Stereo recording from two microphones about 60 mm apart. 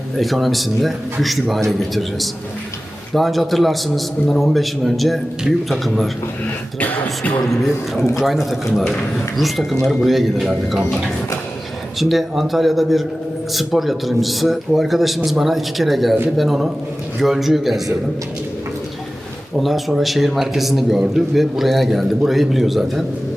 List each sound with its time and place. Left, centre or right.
0.2 s a man's voice: centre
7.4 s a man's voice: centre
11.9 s a man's voice: centre
19.5 s a man's voice: centre